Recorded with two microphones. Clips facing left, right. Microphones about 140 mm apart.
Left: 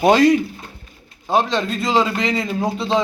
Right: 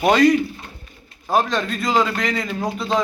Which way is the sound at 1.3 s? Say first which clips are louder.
Left 1 dB; 25° left (ahead or behind).